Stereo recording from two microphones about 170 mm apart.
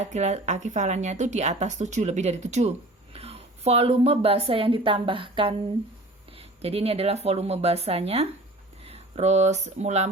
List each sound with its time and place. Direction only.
0.0 s speech: 40° right (ahead or behind)
6.6 s speech: 35° right (ahead or behind)